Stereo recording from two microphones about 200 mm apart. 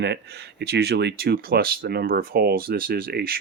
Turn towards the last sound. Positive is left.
turn(degrees=-50)  # may be behind; listen again after turning